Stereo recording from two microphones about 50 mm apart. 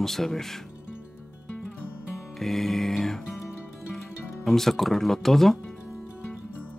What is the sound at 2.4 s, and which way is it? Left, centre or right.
Speech, centre.